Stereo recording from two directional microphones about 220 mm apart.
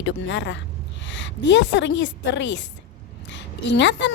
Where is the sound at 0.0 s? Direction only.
55° left (ahead or behind).